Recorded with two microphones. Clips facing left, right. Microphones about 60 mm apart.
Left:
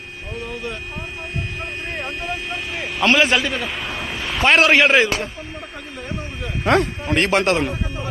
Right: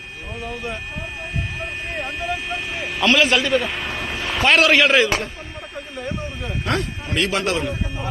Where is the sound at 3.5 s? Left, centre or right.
Centre.